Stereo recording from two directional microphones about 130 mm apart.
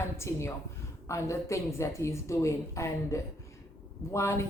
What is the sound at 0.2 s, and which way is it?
Speech, 20° left (ahead or behind).